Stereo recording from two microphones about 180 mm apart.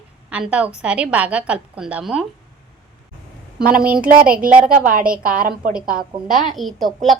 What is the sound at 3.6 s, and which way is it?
A woman's voice, 55° right (ahead or behind).